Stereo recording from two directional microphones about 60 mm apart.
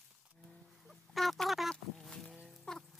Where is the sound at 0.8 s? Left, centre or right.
Centre.